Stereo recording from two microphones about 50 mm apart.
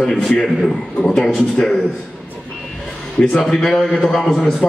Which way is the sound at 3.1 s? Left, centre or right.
Centre.